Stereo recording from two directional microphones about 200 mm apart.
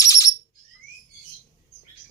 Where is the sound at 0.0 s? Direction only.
15° left (ahead or behind).